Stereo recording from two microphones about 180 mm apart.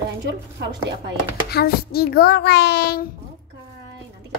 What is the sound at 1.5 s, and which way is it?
A child's voice, 60° left (ahead or behind).